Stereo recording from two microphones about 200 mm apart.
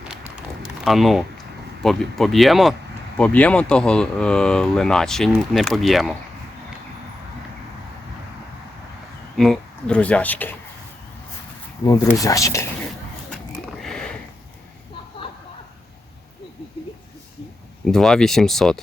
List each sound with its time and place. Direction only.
0.1 s a sound: centre (ahead or behind)
1.8 s speech: centre (ahead or behind)
9.3 s speech: centre (ahead or behind)
11.9 s speech: 15° left (ahead or behind)
13.8 s sniff: 5° left (ahead or behind)
17.9 s speech: 5° left (ahead or behind)